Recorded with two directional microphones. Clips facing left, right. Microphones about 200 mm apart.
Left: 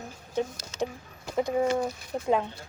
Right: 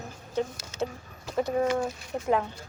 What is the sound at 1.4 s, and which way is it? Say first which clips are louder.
Speech: even; 15° left (ahead or behind).